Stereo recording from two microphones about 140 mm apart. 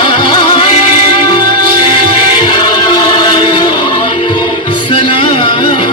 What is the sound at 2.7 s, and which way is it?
Music, 30° left (ahead or behind).